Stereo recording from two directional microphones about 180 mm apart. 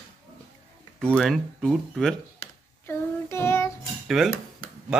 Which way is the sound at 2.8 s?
15° left (ahead or behind).